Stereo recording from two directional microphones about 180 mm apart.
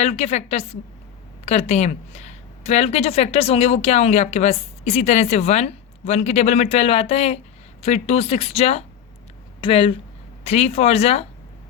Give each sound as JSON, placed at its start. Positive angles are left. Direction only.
{"t": 0.0, "sound": "a woman's voice", "side_deg": 35}